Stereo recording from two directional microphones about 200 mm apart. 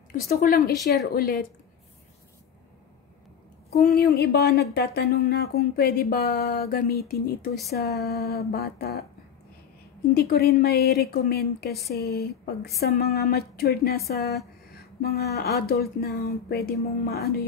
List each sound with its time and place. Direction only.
0.1 s speech: 45° left (ahead or behind)
3.9 s speech: 50° left (ahead or behind)
10.1 s speech: 50° left (ahead or behind)